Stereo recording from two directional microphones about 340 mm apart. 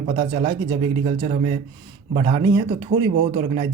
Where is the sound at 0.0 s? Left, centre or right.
Centre.